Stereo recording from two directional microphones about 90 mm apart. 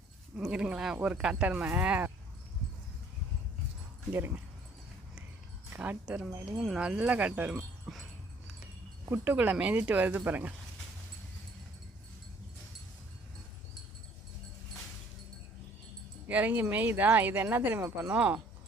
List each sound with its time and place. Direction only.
0.3 s speech: 10° right (ahead or behind)
5.7 s speech: 20° right (ahead or behind)
9.0 s speech: 20° right (ahead or behind)
16.2 s speech: 20° right (ahead or behind)